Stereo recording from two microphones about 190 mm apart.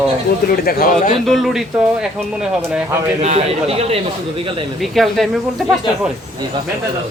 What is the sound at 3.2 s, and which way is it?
Speech, 35° right (ahead or behind).